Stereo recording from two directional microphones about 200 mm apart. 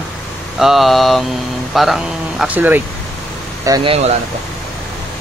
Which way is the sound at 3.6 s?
20° right (ahead or behind).